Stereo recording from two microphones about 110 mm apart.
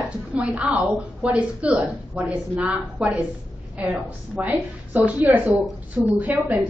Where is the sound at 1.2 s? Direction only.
10° right (ahead or behind).